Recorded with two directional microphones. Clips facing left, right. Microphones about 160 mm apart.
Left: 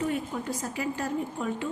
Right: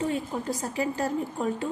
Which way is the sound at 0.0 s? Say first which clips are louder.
Right 1 dB; 30° right (ahead or behind).